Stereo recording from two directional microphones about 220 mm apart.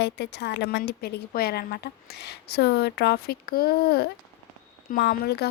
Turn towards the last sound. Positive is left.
turn(degrees=45)  # may be behind; listen again after turning